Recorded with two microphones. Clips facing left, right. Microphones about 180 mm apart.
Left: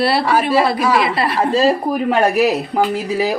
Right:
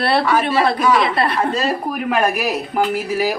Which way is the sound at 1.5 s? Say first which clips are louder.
Left 6 dB; 30° left (ahead or behind).